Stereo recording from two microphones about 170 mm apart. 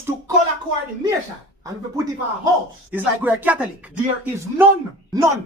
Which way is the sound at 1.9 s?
20° right (ahead or behind).